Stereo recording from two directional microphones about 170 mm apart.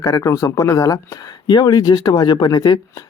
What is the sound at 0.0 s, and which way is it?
Speech, 15° left (ahead or behind).